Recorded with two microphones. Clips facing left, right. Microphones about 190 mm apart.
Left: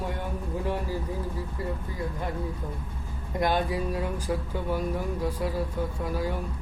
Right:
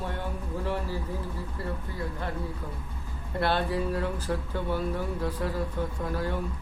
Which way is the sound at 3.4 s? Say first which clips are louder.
Left 1 dB; 10° left (ahead or behind).